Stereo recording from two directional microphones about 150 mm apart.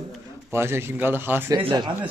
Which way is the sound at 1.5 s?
30° right (ahead or behind).